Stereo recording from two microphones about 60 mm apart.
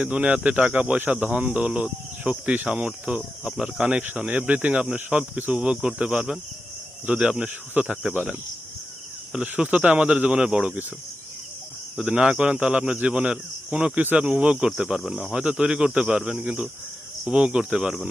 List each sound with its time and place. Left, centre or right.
0.0 s speech: right
3.4 s speech: centre
9.3 s speech: centre
11.9 s speech: centre
14.8 s speech: centre